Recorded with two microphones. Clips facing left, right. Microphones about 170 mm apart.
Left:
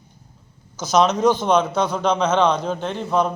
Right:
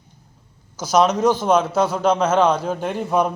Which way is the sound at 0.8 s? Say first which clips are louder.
Right 1 dB; 10° right (ahead or behind).